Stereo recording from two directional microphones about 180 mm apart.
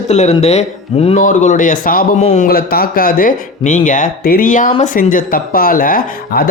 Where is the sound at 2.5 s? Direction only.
55° left (ahead or behind).